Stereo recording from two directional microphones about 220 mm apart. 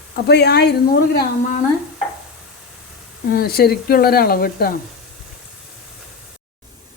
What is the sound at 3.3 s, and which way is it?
Speech, 45° left (ahead or behind).